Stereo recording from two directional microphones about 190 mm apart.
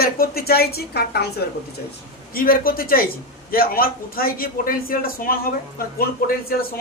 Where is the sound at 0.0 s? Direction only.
50° left (ahead or behind).